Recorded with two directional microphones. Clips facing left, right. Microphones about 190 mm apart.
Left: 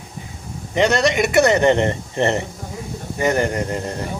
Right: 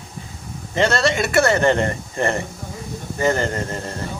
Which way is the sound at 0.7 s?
15° left (ahead or behind).